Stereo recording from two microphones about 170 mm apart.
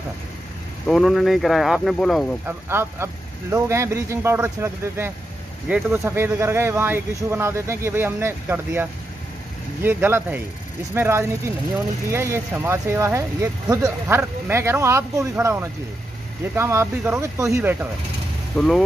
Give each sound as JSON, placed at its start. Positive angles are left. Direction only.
{"t": 0.8, "sound": "speech", "side_deg": 0}
{"t": 2.4, "sound": "speech", "side_deg": -15}
{"t": 9.8, "sound": "speech", "side_deg": -10}
{"t": 18.6, "sound": "speech", "side_deg": 0}